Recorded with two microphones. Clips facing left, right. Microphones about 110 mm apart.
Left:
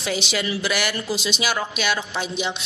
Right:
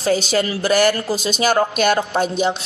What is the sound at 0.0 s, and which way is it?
A woman's voice, 40° right (ahead or behind).